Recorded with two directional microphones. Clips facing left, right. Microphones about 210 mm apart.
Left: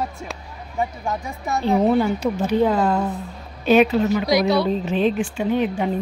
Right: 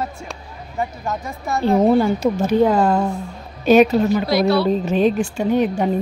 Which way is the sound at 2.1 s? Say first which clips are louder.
Right 3 dB; 45° right (ahead or behind).